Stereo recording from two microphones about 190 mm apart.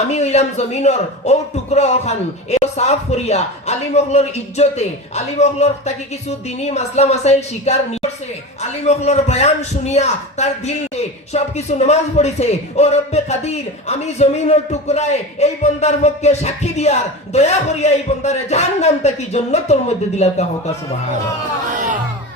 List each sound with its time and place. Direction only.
0.1 s speech: 35° left (ahead or behind)
8.8 s speech: 35° left (ahead or behind)